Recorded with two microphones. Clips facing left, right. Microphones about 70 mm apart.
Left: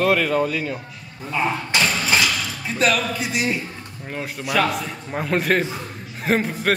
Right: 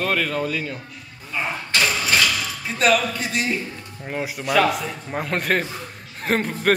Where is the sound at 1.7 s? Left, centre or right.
Centre.